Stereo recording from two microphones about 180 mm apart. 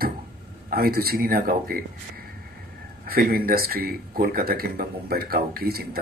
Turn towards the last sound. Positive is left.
turn(degrees=-55)  # may be behind; listen again after turning